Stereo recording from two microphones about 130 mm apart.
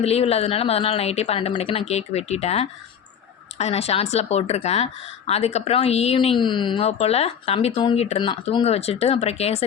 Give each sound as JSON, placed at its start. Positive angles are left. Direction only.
{"t": 0.0, "sound": "speech", "side_deg": 50}
{"t": 6.4, "sound": "speech", "side_deg": 35}
{"t": 6.8, "sound": "speech", "side_deg": 55}
{"t": 8.2, "sound": "speech", "side_deg": 40}